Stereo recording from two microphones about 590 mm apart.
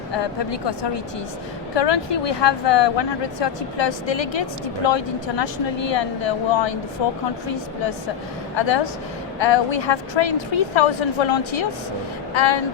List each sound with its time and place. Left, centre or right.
1.7 s a woman's voice: left
8.5 s a woman's voice: left